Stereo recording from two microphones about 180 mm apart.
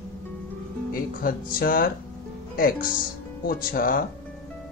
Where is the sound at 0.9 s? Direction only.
55° left (ahead or behind).